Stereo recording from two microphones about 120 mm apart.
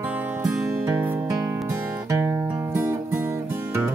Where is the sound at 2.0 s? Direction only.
20° right (ahead or behind).